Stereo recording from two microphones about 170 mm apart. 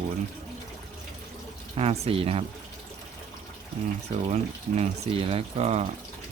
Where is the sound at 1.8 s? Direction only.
35° right (ahead or behind).